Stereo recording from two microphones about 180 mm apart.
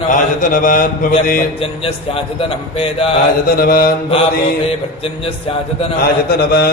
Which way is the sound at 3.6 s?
55° left (ahead or behind).